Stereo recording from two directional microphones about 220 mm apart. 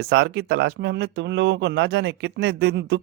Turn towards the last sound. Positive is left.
turn(degrees=-50)  # may be behind; listen again after turning